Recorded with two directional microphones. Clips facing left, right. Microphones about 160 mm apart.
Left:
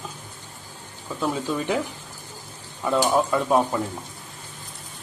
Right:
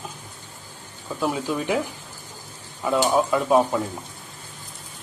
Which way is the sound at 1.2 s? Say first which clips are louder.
Right 1 dB; 5° right (ahead or behind).